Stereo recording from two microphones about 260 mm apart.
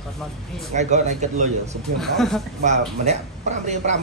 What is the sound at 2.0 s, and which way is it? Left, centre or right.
Speech, centre.